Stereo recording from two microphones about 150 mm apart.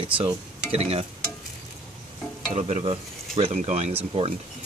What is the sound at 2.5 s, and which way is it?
Speech, 45° right (ahead or behind).